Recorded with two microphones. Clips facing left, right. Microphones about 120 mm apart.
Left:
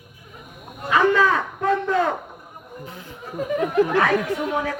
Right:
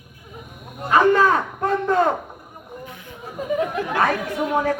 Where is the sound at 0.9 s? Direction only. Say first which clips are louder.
Right 2 dB; 40° right (ahead or behind).